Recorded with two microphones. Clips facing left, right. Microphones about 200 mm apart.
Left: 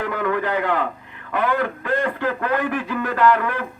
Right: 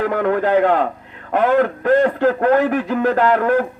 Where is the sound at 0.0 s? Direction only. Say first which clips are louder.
Right 5 dB; 50° right (ahead or behind).